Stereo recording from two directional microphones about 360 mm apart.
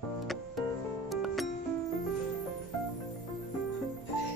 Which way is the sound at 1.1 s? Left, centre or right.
Centre.